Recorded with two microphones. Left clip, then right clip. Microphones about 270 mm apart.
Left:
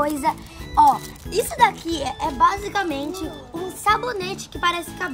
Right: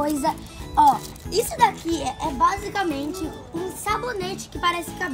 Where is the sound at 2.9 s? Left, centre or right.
Centre.